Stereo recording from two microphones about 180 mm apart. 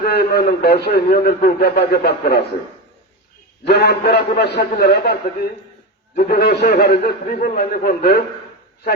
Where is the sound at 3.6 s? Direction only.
65° left (ahead or behind).